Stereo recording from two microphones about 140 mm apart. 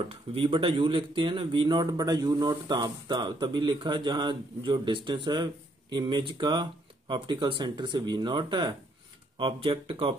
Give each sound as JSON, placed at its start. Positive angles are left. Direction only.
{"t": 0.1, "sound": "speech", "side_deg": -40}